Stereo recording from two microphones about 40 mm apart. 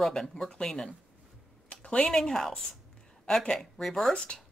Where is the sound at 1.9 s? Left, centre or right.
Centre.